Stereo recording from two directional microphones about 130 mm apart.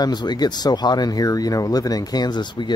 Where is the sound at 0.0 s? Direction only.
35° left (ahead or behind).